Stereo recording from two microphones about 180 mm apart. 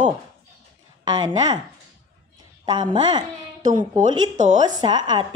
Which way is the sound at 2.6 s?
25° right (ahead or behind).